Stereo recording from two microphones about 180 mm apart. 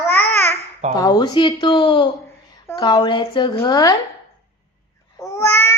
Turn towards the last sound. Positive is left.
turn(degrees=15)  # may be behind; listen again after turning